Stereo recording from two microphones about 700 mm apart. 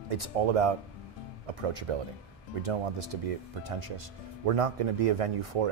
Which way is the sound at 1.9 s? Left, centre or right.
Right.